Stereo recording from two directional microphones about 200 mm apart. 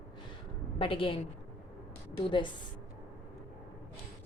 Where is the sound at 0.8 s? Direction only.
25° left (ahead or behind).